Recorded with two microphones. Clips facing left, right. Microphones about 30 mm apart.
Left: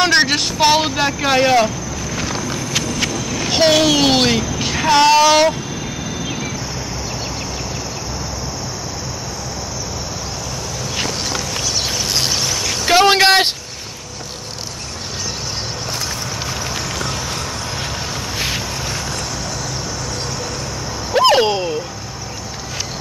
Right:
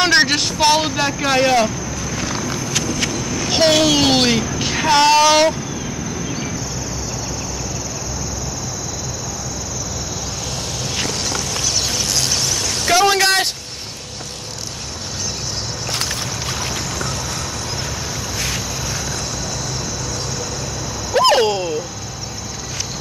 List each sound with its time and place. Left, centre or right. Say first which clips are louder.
0.0 s vehicle: even; centre
11.1 s a sound: even; left
12.3 s vehicle: left 1 dB; left
21.1 s vehicle: left 1 dB; centre